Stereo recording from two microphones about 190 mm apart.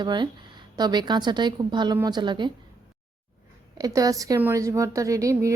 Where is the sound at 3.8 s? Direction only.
20° right (ahead or behind).